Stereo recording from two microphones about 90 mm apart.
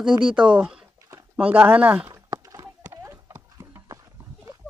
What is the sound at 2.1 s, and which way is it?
Horse, 40° right (ahead or behind).